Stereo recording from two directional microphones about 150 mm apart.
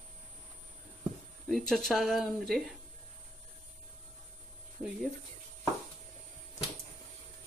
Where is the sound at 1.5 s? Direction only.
5° left (ahead or behind).